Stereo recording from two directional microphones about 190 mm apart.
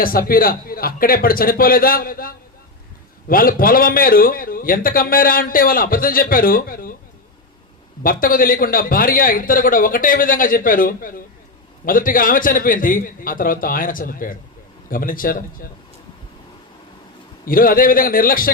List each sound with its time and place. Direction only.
0.0 s a man's voice: 50° left (ahead or behind)
8.0 s a man's voice: 50° left (ahead or behind)
17.4 s a man's voice: 50° left (ahead or behind)